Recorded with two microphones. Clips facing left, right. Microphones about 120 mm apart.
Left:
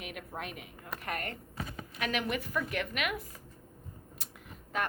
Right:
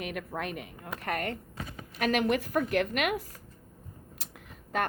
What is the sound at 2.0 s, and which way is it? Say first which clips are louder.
Speech: right 7 dB; 45° right (ahead or behind).